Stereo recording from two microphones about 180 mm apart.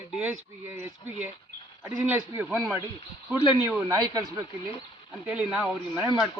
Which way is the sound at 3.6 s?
15° right (ahead or behind).